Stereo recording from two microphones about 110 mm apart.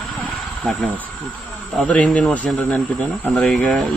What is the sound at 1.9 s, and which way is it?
Speech, 10° left (ahead or behind).